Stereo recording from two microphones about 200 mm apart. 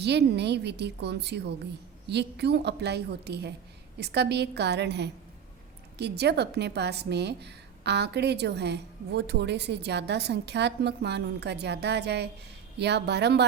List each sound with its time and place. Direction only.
0.0 s a woman's voice: 55° right (ahead or behind)